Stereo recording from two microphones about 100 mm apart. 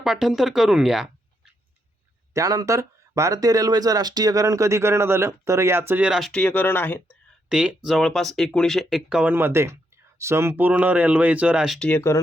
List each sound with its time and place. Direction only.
0.0 s speech: centre (ahead or behind)
2.3 s speech: 35° right (ahead or behind)
6.1 s speech: centre (ahead or behind)
6.3 s speech: 15° left (ahead or behind)
7.5 s speech: 10° right (ahead or behind)
9.3 s speech: 25° right (ahead or behind)
10.5 s speech: 15° right (ahead or behind)
11.8 s speech: 15° left (ahead or behind)